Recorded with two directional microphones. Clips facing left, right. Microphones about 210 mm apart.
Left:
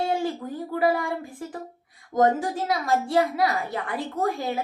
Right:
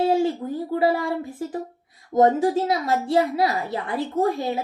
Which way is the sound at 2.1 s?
25° right (ahead or behind).